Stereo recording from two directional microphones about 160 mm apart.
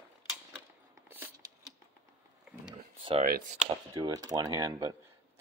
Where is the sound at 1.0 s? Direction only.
15° right (ahead or behind).